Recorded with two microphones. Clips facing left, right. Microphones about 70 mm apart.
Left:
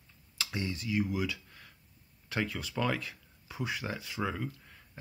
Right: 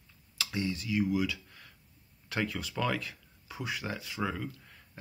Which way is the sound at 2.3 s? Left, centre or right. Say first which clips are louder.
Even; centre.